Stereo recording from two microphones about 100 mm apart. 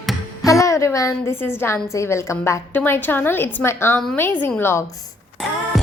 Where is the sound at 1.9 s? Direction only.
30° left (ahead or behind).